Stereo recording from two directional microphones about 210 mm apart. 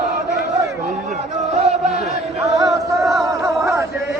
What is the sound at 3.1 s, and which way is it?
Chant, 15° right (ahead or behind).